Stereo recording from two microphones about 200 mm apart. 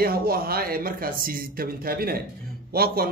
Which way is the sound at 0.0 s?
50° right (ahead or behind).